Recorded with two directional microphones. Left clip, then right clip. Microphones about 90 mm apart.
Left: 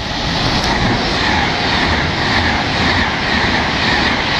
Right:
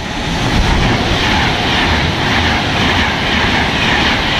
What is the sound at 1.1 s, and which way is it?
Vehicle, 45° left (ahead or behind).